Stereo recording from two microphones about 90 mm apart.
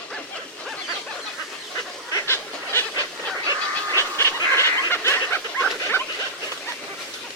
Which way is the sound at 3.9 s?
30° left (ahead or behind).